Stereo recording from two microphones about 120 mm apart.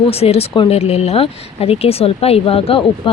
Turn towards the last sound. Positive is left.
turn(degrees=50)  # may be behind; listen again after turning